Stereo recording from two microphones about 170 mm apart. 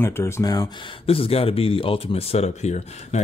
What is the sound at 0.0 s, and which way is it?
Speech, 15° left (ahead or behind).